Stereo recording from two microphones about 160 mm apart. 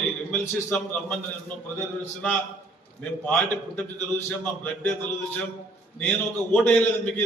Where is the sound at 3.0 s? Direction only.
10° left (ahead or behind).